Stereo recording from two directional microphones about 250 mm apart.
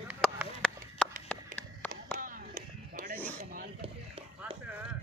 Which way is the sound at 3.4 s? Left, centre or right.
Right.